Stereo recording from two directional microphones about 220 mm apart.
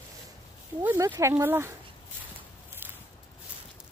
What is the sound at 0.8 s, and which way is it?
Speech, 10° right (ahead or behind).